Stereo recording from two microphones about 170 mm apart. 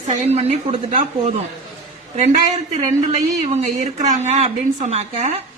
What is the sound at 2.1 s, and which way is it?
Speech, 40° right (ahead or behind).